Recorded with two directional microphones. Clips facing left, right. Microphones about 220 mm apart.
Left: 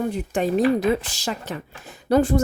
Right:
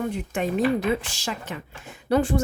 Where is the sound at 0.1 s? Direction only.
35° left (ahead or behind).